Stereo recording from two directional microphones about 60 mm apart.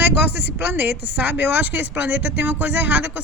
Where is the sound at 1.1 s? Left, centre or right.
Right.